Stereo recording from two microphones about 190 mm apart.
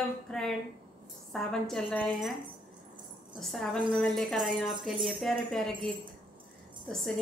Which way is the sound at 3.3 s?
Centre (ahead or behind).